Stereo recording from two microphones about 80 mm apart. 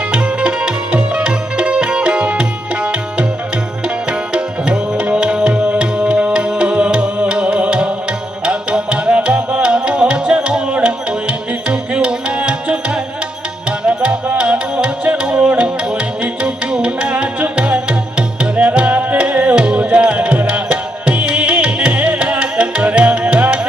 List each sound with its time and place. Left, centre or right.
0.1 s music: centre